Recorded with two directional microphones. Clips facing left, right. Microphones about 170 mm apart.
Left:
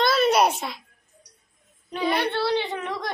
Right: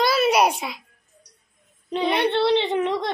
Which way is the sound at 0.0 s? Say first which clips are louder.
Right 1 dB; 5° right (ahead or behind).